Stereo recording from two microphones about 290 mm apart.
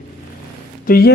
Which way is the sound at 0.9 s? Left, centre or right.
Left.